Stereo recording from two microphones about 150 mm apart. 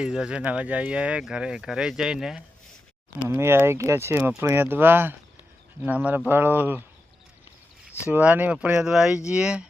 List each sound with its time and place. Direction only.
0.0 s speech: 5° right (ahead or behind)
3.2 s speech: 15° right (ahead or behind)
8.1 s speech: 10° right (ahead or behind)